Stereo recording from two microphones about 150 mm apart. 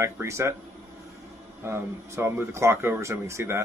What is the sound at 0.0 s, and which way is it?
Speech, 20° right (ahead or behind).